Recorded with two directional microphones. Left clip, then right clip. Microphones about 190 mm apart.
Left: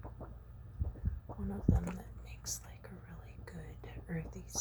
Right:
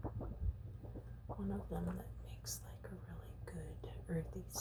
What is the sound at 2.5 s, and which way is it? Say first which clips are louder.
Whispering: left 5 dB; 10° left (ahead or behind).